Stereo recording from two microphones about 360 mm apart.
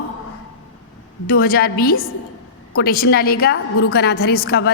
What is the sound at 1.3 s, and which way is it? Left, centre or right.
A woman's voice, left.